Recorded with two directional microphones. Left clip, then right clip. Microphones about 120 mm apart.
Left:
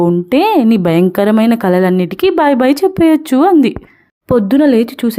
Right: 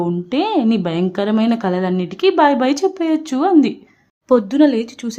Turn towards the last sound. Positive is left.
turn(degrees=50)  # may be behind; listen again after turning